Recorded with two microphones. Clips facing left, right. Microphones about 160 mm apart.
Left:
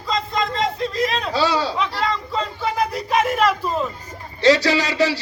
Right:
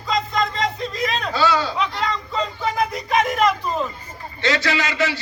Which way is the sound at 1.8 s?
Centre (ahead or behind).